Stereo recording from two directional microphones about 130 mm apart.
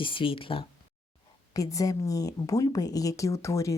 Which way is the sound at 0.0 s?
40° left (ahead or behind).